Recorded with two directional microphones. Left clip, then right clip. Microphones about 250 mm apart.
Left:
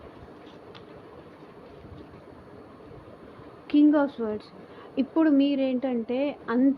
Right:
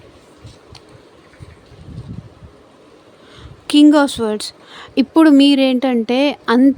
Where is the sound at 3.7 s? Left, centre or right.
Right.